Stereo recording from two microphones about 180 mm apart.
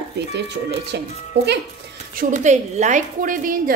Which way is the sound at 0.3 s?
70° right (ahead or behind).